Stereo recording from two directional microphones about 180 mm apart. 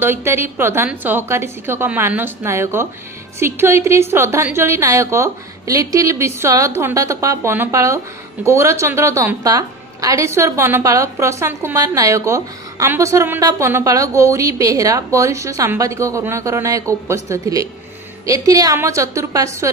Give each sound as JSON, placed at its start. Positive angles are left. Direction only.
{"t": 0.0, "sound": "a woman's voice", "side_deg": -15}